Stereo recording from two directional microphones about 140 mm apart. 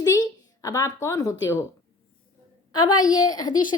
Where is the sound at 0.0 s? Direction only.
25° left (ahead or behind).